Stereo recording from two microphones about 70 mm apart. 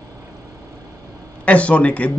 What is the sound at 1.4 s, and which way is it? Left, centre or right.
Speech, centre.